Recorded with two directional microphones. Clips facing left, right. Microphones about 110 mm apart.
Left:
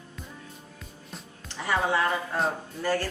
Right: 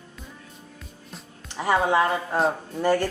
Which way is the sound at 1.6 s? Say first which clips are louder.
Right 5 dB; 25° right (ahead or behind).